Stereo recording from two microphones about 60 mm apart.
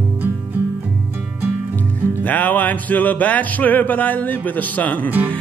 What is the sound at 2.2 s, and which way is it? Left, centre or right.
Music, left.